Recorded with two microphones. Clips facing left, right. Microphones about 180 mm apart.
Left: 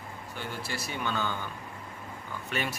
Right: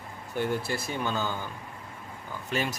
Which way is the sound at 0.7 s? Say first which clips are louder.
Right 5 dB; 50° right (ahead or behind).